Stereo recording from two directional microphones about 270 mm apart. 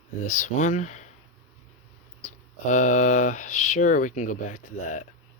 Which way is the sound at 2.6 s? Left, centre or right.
Left.